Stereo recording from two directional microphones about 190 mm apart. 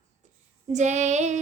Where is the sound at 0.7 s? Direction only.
40° right (ahead or behind).